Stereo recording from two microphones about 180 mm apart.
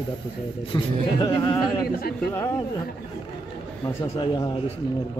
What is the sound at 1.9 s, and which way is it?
Speech, 55° left (ahead or behind).